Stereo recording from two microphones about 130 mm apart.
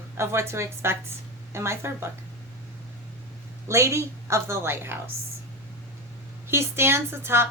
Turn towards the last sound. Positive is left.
turn(degrees=-20)  # may be behind; listen again after turning